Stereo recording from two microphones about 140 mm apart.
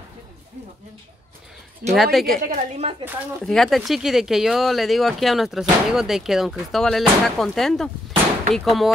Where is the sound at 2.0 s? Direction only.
Centre (ahead or behind).